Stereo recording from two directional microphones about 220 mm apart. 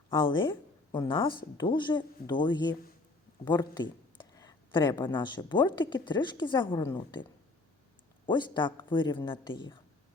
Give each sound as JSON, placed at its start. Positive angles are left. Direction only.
{"t": 0.1, "sound": "speech", "side_deg": 20}
{"t": 8.3, "sound": "speech", "side_deg": 20}